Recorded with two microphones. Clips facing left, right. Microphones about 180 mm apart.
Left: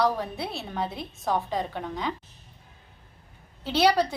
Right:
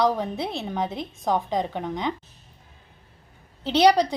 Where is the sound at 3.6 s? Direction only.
15° right (ahead or behind).